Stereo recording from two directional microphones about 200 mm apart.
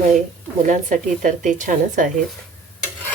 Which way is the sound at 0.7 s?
40° right (ahead or behind).